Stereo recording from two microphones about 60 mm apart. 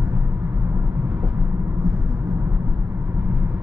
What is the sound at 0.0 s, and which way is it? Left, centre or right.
Vehicle, centre.